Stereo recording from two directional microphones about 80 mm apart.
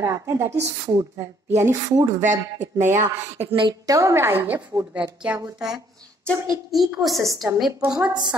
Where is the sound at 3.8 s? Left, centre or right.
Right.